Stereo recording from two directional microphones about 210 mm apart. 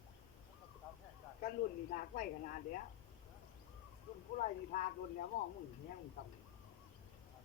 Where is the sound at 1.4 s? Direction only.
40° left (ahead or behind).